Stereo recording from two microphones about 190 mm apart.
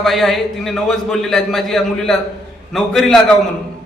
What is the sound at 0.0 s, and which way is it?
A man's voice, centre (ahead or behind).